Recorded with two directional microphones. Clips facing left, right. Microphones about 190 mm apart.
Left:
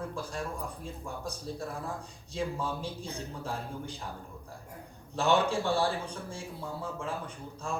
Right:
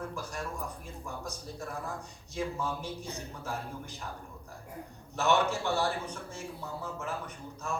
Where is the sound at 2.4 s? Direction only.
30° left (ahead or behind).